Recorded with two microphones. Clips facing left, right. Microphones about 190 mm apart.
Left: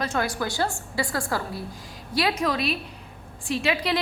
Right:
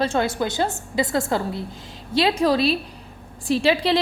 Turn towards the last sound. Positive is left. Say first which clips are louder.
# right 6 dB
turn(degrees=-30)  # may be behind; listen again after turning